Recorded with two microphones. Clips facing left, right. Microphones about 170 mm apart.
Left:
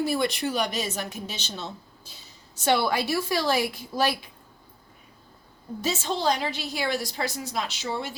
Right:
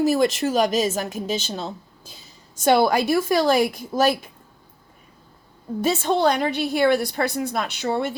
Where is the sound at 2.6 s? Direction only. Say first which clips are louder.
Right 6 dB; 45° right (ahead or behind).